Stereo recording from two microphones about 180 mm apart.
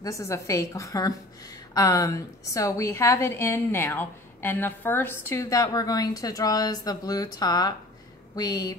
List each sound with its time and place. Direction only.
0.0 s a woman's voice: 15° left (ahead or behind)